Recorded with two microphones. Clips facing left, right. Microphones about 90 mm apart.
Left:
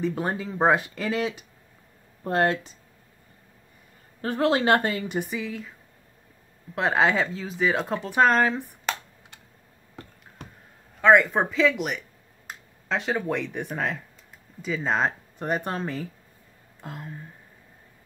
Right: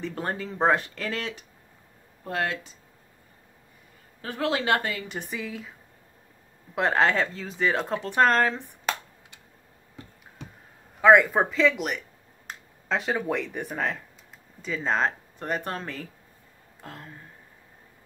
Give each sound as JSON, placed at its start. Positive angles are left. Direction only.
{"t": 0.0, "sound": "speech", "side_deg": 10}
{"t": 2.2, "sound": "speech", "side_deg": 35}
{"t": 4.2, "sound": "speech", "side_deg": 35}
{"t": 5.0, "sound": "speech", "side_deg": 15}
{"t": 5.3, "sound": "speech", "side_deg": 0}
{"t": 6.7, "sound": "speech", "side_deg": 5}
{"t": 8.9, "sound": "computer keyboard", "side_deg": -5}
{"t": 11.0, "sound": "speech", "side_deg": -5}
{"t": 15.3, "sound": "speech", "side_deg": 20}